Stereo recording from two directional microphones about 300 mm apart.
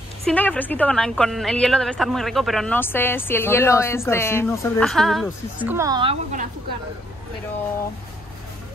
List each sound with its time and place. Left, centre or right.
0.2 s a woman's voice: centre